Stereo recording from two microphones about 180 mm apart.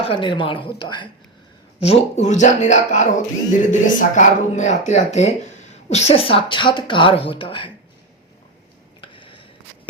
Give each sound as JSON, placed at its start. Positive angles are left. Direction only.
{"t": 0.0, "sound": "speech", "side_deg": 25}
{"t": 1.8, "sound": "speech", "side_deg": 35}
{"t": 9.0, "sound": "a sound", "side_deg": 30}